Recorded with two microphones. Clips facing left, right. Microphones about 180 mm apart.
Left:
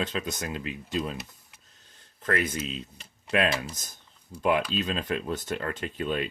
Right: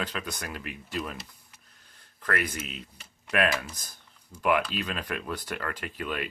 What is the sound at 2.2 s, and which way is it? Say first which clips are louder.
Speech: left 3 dB; 25° left (ahead or behind).